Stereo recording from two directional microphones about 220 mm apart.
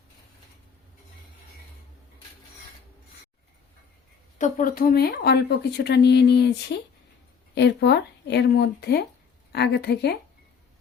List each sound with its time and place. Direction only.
4.4 s speech: 35° left (ahead or behind)
7.5 s speech: 50° left (ahead or behind)